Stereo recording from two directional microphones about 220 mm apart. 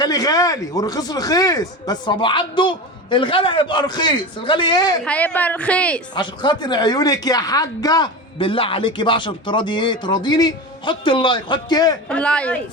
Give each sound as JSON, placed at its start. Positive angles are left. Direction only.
{"t": 0.0, "sound": "a woman's voice", "side_deg": 15}
{"t": 5.0, "sound": "a woman's voice", "side_deg": 5}
{"t": 6.1, "sound": "a woman's voice", "side_deg": 20}
{"t": 12.0, "sound": "a woman's voice", "side_deg": 5}